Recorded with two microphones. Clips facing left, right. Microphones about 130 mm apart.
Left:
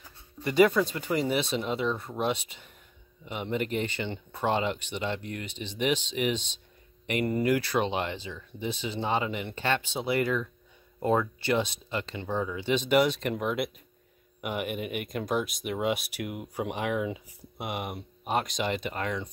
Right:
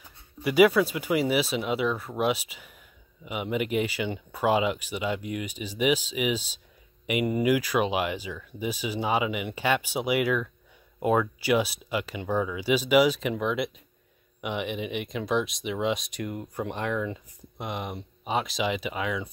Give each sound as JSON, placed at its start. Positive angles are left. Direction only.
{"t": 0.4, "sound": "speech", "side_deg": -10}